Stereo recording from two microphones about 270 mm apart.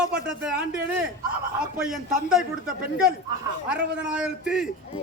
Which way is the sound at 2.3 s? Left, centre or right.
Centre.